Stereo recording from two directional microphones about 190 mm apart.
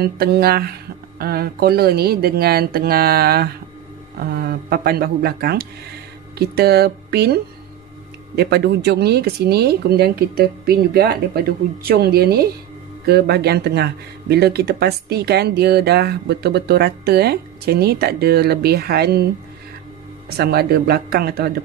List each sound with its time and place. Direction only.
0.0 s speech: 55° right (ahead or behind)
8.4 s speech: 60° right (ahead or behind)
20.3 s speech: 55° right (ahead or behind)